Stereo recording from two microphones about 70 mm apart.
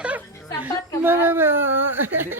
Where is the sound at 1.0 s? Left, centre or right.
Right.